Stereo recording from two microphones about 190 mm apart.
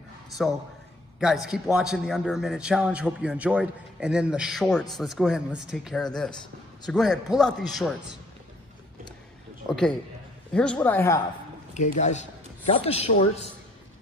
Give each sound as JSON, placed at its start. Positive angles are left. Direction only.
{"t": 0.4, "sound": "a man's voice", "side_deg": 0}
{"t": 9.7, "sound": "a man's voice", "side_deg": 5}
{"t": 11.7, "sound": "speech", "side_deg": 40}